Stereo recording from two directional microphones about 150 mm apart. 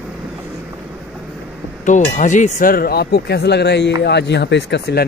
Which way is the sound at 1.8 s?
55° left (ahead or behind).